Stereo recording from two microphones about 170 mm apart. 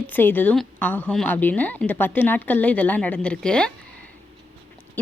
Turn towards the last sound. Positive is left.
turn(degrees=5)  # may be behind; listen again after turning